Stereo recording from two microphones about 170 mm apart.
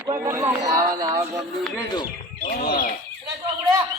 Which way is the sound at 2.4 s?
60° left (ahead or behind).